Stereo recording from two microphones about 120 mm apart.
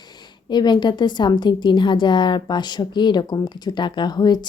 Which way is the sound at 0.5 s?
40° left (ahead or behind).